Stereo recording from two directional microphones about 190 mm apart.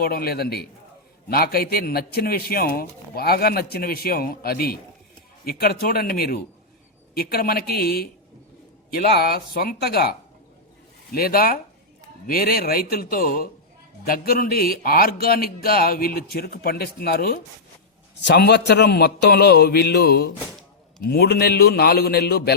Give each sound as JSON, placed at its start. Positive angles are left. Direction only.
{"t": 0.0, "sound": "a man's voice", "side_deg": 55}